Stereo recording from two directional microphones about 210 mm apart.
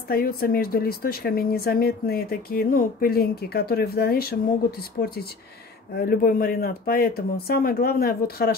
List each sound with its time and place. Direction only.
0.1 s a woman's voice: 45° left (ahead or behind)